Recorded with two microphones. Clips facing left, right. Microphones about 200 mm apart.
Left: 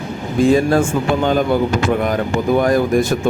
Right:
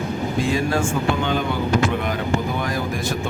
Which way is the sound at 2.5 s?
50° left (ahead or behind).